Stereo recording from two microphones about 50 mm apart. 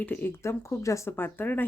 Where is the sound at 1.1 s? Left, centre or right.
Left.